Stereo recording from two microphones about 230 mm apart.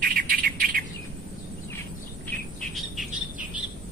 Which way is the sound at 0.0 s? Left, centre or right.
Right.